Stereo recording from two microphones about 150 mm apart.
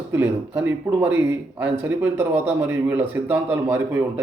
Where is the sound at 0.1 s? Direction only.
15° right (ahead or behind).